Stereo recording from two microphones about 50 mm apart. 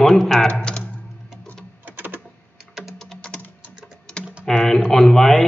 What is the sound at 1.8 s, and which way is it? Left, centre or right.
Typing, right.